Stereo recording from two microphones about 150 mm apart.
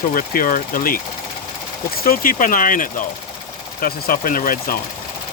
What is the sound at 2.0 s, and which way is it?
Speech, 70° left (ahead or behind).